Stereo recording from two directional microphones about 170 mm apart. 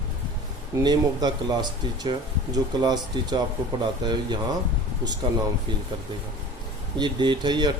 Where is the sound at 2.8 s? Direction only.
25° right (ahead or behind).